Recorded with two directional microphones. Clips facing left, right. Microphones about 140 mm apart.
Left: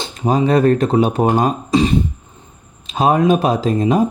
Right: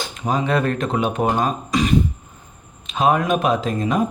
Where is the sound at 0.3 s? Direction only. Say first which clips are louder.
Left 7 dB; 35° left (ahead or behind).